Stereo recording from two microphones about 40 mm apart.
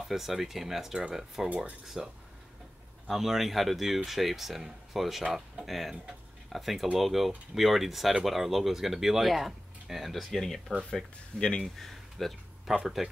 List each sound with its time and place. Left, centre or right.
0.1 s speech: centre; by 11.6 s left
11.6 s speech: centre